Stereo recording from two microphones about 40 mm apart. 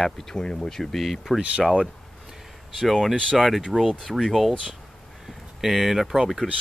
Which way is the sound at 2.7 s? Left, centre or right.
Centre.